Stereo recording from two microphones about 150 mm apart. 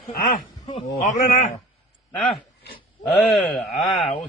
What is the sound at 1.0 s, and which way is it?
Speech, 55° left (ahead or behind).